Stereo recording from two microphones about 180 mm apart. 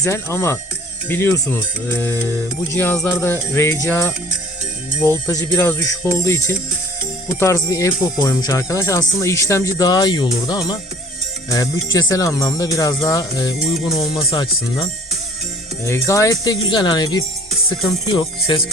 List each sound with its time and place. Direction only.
0.0 s music: 15° left (ahead or behind)
7.3 s speech: 15° left (ahead or behind)
14.0 s speech: 35° left (ahead or behind)